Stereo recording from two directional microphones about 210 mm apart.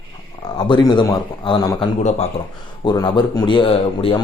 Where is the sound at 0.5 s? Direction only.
20° left (ahead or behind).